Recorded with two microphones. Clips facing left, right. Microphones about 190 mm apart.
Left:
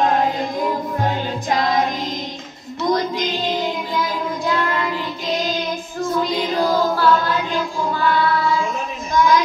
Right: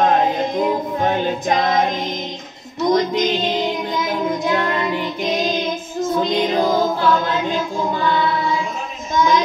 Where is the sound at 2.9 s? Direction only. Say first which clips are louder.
Right 4 dB; 20° right (ahead or behind).